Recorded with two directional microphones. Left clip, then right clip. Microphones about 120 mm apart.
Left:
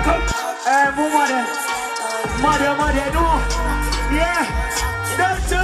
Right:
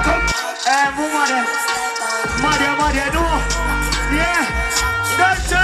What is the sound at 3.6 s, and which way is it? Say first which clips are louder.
Speech: right 3 dB; 40° right (ahead or behind).